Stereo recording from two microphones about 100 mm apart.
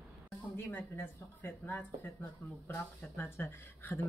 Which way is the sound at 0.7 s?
20° left (ahead or behind).